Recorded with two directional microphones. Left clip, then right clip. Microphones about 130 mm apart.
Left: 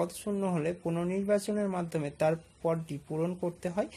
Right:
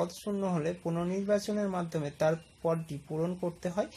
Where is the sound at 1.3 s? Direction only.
30° left (ahead or behind).